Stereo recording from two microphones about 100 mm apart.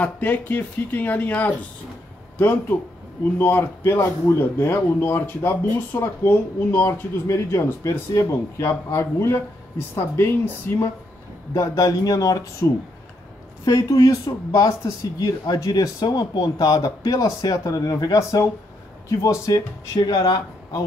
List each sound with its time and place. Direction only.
0.0 s speech: 15° left (ahead or behind)
11.5 s speech: 35° left (ahead or behind)
13.7 s speech: 35° left (ahead or behind)